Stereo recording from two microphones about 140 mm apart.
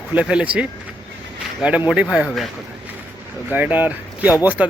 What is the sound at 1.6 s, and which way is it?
Speech, 10° right (ahead or behind).